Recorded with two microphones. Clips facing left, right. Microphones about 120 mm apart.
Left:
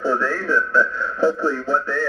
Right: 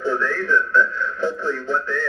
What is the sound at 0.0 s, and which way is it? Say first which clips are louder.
Speech: left 1 dB; 35° left (ahead or behind).